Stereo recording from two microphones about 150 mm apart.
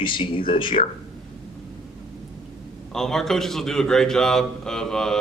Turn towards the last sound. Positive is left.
turn(degrees=5)  # may be behind; listen again after turning